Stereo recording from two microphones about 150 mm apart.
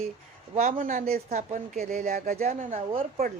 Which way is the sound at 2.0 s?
65° right (ahead or behind).